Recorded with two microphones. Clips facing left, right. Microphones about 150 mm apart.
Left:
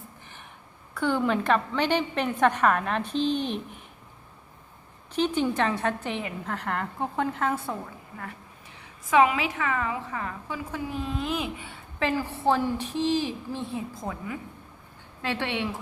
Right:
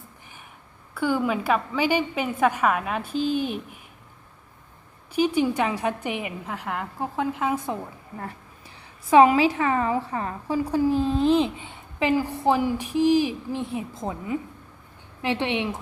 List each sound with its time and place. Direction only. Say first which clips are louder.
0.9 s a woman's voice: right 1 dB; 5° right (ahead or behind)
5.1 s a woman's voice: right 3 dB; 10° right (ahead or behind)
9.0 s a woman's voice: right 6 dB; 35° right (ahead or behind); by 15.8 s 20° right (ahead or behind)